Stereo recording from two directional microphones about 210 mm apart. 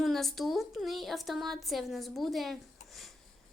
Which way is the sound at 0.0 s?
Centre (ahead or behind).